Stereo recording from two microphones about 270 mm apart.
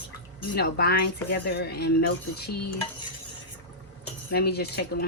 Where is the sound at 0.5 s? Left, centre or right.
Left.